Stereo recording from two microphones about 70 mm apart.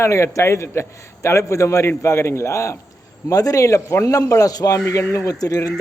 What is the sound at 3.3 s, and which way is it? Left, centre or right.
A man's voice, left.